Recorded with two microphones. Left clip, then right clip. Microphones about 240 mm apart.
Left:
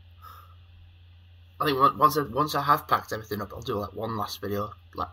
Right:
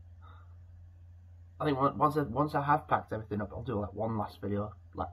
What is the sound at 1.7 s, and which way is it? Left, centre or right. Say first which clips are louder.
Speech: left 8 dB; centre.